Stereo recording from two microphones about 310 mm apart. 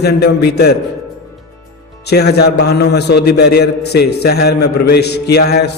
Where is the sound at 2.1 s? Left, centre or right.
Left.